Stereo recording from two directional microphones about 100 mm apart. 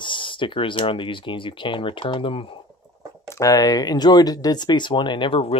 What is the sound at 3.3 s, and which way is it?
Speech, 35° left (ahead or behind).